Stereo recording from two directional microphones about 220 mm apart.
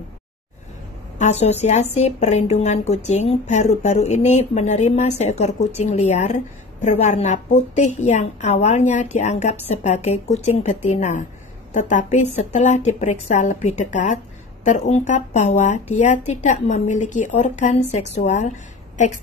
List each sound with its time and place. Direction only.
1.1 s a woman's voice: 30° left (ahead or behind)